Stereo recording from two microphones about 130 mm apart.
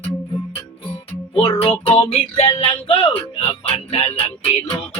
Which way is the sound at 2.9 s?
45° left (ahead or behind).